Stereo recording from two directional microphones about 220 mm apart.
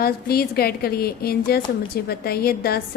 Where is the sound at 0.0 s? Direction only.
45° left (ahead or behind).